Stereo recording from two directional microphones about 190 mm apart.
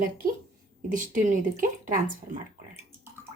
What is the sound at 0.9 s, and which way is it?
Speech, 45° right (ahead or behind).